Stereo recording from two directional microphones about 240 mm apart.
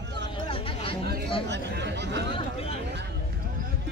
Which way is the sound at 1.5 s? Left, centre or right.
Right.